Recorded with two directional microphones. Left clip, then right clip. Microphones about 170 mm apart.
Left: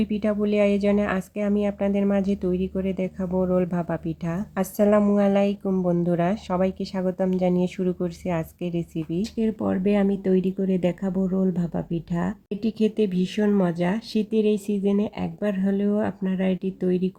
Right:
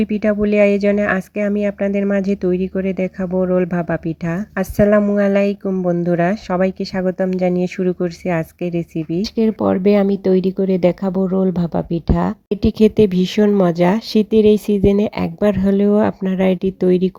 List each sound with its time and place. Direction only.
0.0 s speech: 25° right (ahead or behind)